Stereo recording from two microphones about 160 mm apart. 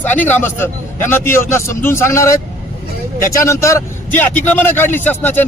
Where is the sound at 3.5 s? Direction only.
20° left (ahead or behind).